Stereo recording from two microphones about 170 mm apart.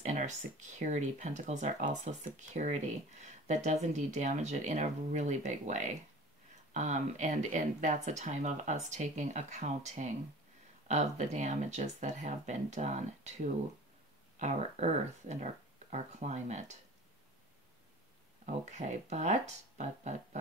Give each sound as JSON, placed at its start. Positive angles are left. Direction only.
{"t": 0.0, "sound": "speech", "side_deg": -45}
{"t": 14.4, "sound": "speech", "side_deg": -45}
{"t": 18.4, "sound": "speech", "side_deg": -45}